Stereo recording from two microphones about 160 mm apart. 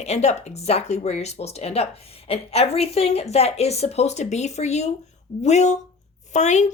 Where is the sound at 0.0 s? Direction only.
45° left (ahead or behind).